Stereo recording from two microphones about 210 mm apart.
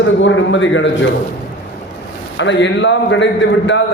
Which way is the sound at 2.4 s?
60° left (ahead or behind).